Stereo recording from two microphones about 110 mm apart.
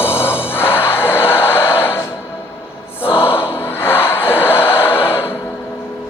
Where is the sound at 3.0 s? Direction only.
55° left (ahead or behind).